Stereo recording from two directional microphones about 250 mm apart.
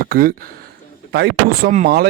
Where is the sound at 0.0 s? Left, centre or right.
Right.